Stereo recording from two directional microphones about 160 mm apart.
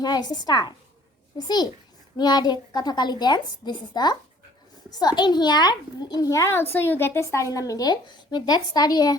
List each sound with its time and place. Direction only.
0.0 s a child's voice: 25° left (ahead or behind)
2.1 s a child's voice: 25° left (ahead or behind)